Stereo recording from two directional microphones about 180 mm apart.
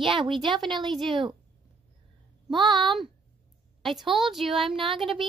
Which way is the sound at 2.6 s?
Centre (ahead or behind).